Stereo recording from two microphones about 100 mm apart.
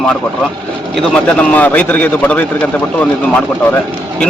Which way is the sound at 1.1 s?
10° left (ahead or behind).